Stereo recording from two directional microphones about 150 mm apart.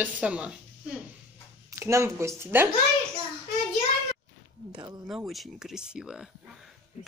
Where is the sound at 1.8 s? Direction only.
20° right (ahead or behind).